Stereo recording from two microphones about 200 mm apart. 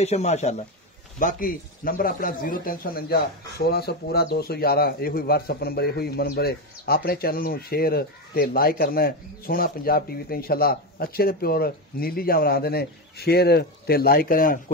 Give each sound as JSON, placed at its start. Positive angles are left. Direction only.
{"t": 0.0, "sound": "speech", "side_deg": 35}
{"t": 1.2, "sound": "speech", "side_deg": 45}